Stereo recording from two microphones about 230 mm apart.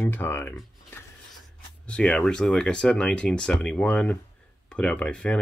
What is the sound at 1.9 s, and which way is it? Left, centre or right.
Speech, centre.